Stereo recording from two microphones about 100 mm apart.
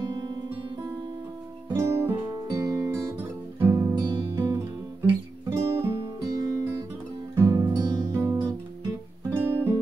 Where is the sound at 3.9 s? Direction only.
40° right (ahead or behind).